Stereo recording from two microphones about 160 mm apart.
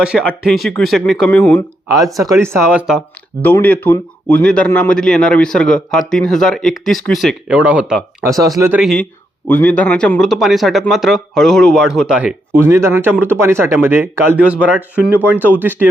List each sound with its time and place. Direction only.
0.0 s speech: 5° right (ahead or behind)
2.4 s speech: 15° right (ahead or behind)
3.4 s speech: 10° left (ahead or behind); by 7.9 s 10° right (ahead or behind)
8.2 s speech: 20° right (ahead or behind)
8.7 s speech: centre (ahead or behind)
9.5 s speech: 10° left (ahead or behind); by 15.4 s 10° right (ahead or behind)